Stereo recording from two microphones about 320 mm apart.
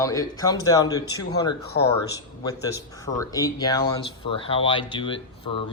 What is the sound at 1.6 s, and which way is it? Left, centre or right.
Speech, left.